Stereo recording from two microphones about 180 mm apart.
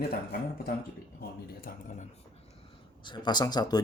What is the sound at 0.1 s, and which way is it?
Speech, 55° left (ahead or behind).